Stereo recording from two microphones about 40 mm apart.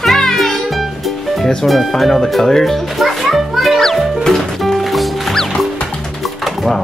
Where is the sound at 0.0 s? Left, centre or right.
Centre.